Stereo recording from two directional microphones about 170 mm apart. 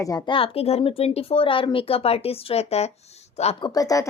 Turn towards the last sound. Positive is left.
turn(degrees=20)  # may be behind; listen again after turning